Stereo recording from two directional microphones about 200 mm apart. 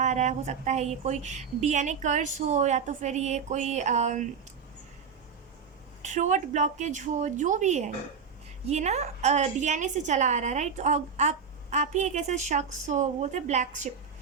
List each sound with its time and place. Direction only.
0.0 s a woman's voice: 35° right (ahead or behind)
6.0 s a woman's voice: 35° right (ahead or behind)